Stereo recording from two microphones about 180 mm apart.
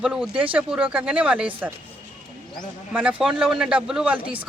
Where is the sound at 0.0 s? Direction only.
5° right (ahead or behind).